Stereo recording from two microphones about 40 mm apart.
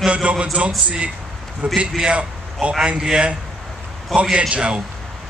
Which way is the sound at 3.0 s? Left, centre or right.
Centre.